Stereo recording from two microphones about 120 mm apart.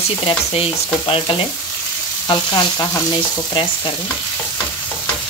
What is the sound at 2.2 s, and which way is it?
Speech, 35° left (ahead or behind).